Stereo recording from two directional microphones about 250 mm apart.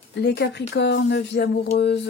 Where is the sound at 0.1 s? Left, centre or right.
Left.